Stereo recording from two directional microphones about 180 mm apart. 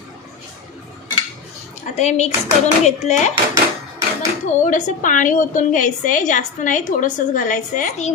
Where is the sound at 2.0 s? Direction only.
40° left (ahead or behind).